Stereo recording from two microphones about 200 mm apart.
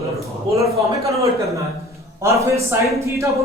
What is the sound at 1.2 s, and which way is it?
A man's voice, 15° right (ahead or behind).